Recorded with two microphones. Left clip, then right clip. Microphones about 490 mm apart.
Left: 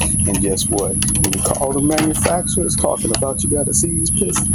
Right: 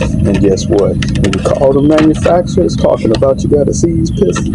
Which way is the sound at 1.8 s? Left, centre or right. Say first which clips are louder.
Right 9 dB; left.